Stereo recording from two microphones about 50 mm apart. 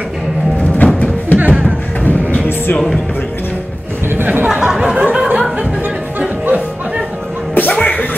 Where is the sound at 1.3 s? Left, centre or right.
Right.